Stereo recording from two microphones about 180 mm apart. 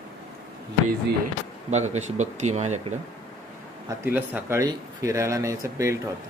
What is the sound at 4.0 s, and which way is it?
Speech, 10° right (ahead or behind).